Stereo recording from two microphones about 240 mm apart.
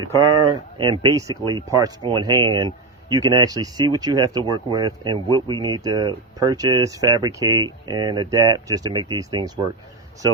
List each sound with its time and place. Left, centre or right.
0.2 s speech: centre